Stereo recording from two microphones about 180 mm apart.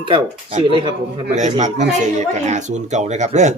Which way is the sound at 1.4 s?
40° right (ahead or behind).